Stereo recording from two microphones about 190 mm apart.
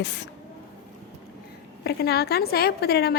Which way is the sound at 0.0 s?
65° left (ahead or behind).